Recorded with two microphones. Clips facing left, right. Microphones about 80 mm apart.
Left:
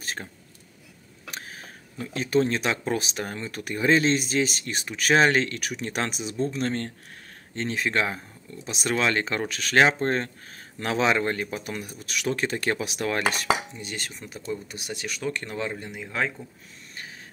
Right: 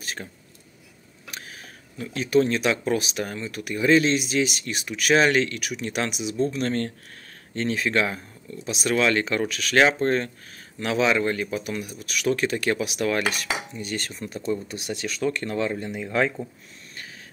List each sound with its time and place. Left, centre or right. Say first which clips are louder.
0.0 s speech: even; left
1.3 s speech: left 1 dB; left
13.7 s speech: right 5 dB; centre